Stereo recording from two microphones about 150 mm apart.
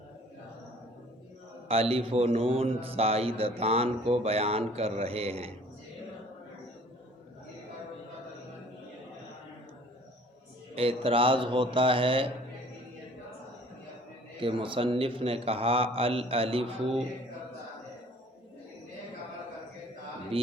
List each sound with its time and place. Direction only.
1.6 s speech: 40° right (ahead or behind)
10.8 s speech: 40° right (ahead or behind)
14.4 s speech: 35° right (ahead or behind)
20.3 s speech: 40° right (ahead or behind)